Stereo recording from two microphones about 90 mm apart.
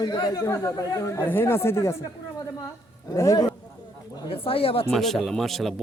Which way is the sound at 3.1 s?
40° left (ahead or behind).